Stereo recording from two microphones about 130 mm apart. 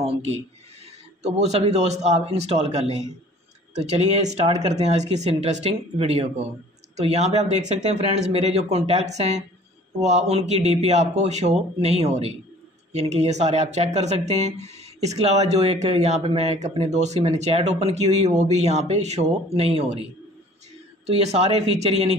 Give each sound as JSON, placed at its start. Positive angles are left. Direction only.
{"t": 0.0, "sound": "speech", "side_deg": -55}